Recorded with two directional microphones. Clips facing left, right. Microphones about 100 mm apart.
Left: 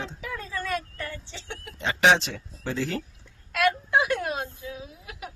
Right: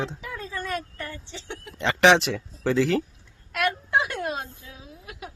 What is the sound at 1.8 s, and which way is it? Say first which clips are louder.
Speech: right 3 dB; 80° right.